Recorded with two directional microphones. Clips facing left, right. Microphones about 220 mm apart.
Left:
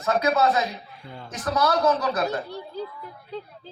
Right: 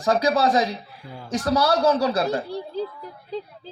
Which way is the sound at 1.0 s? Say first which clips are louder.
Right 11 dB; 10° right (ahead or behind).